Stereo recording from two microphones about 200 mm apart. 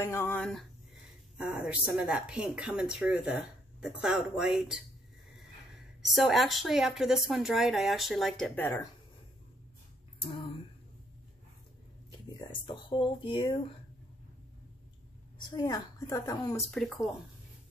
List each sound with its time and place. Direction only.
0.0 s a woman's voice: 15° left (ahead or behind); by 4.7 s 5° right (ahead or behind)
6.0 s a woman's voice: centre (ahead or behind)
10.1 s a sound: 25° left (ahead or behind)
12.4 s speech: 25° left (ahead or behind)
15.5 s a woman's voice: 20° left (ahead or behind)
16.7 s a woman's voice: centre (ahead or behind)